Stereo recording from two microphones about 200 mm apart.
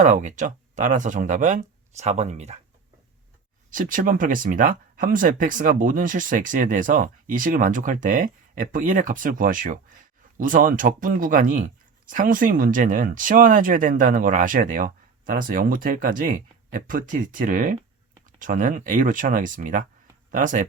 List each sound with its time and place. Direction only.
0.0 s speech: 40° right (ahead or behind)
3.7 s speech: 40° right (ahead or behind)